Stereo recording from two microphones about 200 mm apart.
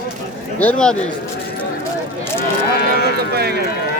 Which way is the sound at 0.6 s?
5° left (ahead or behind).